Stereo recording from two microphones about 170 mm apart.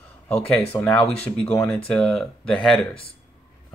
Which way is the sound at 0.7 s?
20° left (ahead or behind).